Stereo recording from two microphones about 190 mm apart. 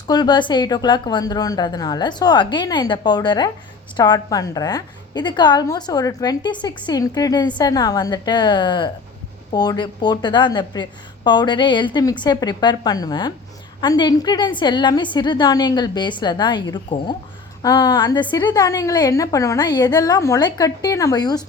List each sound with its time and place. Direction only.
0.1 s a woman's voice: 20° left (ahead or behind)